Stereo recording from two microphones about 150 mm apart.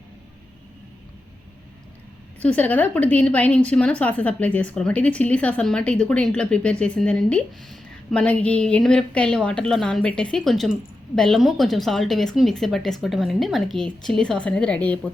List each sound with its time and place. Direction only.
2.4 s a woman's voice: 10° left (ahead or behind)